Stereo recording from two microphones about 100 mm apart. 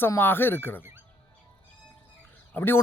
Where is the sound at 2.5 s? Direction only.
20° left (ahead or behind).